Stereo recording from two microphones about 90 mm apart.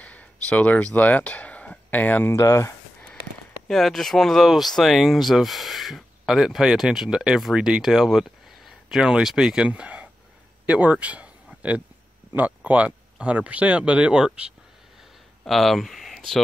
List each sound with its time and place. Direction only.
0.0 s a sound: 15° left (ahead or behind)
0.9 s speech: 15° left (ahead or behind)
2.3 s speech: 35° left (ahead or behind)
3.6 s speech: 5° left (ahead or behind)
15.4 s speech: centre (ahead or behind)